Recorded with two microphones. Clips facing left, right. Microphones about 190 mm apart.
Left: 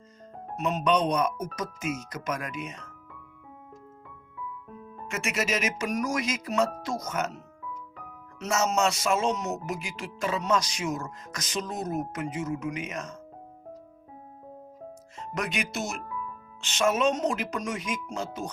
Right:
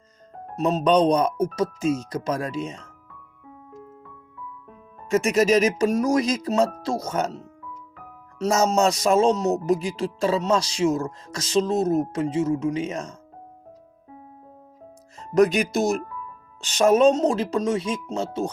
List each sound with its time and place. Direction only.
0.5 s speech: 30° right (ahead or behind)
5.0 s speech: 35° right (ahead or behind)
15.2 s speech: 40° right (ahead or behind)